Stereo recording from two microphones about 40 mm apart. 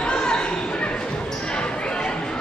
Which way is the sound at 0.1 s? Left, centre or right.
Left.